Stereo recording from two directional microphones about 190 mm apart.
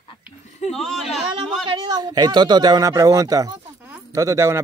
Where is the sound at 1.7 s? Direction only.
20° right (ahead or behind).